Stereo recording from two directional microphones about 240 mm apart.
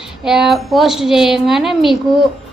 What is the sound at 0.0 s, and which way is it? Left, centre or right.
A woman's voice, centre.